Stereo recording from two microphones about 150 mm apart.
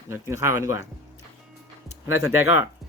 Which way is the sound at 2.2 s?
15° right (ahead or behind).